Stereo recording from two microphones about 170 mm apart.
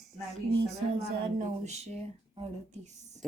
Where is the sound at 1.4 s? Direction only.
40° right (ahead or behind).